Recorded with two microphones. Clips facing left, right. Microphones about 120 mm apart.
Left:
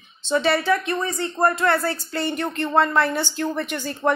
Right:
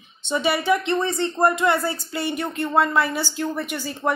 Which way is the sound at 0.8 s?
25° right (ahead or behind).